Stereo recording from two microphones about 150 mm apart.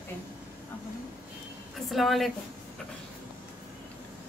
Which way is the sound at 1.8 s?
Centre (ahead or behind).